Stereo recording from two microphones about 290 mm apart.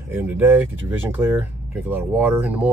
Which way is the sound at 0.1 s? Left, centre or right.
Centre.